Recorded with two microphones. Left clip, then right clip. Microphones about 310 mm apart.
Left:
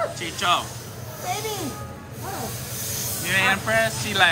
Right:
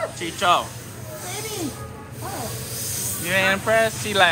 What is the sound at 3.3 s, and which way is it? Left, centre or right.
Speech, centre.